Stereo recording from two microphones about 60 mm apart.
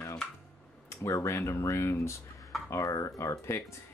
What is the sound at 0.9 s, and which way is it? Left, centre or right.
Speech, left.